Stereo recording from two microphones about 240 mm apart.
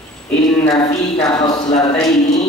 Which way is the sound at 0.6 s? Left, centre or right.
Centre.